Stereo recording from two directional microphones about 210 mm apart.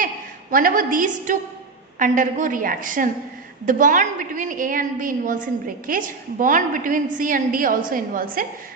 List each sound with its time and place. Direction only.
0.5 s a woman's voice: 40° right (ahead or behind)